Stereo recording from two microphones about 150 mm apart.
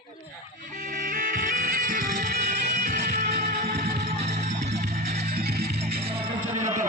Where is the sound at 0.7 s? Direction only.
70° right (ahead or behind); by 4.8 s 45° right (ahead or behind).